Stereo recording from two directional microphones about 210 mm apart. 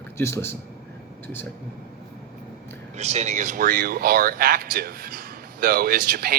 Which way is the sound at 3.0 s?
35° right (ahead or behind).